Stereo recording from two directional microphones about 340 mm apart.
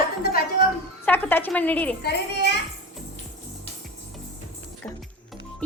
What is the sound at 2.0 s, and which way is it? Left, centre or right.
Speech, left.